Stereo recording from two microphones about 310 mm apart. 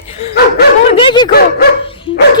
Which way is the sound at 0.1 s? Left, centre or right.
Left.